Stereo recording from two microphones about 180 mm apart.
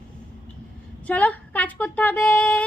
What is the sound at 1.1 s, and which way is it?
A woman's voice, 10° left (ahead or behind).